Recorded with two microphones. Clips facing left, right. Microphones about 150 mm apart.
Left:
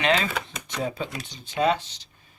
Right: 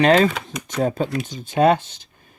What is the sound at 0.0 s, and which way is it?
Speech, 45° right (ahead or behind).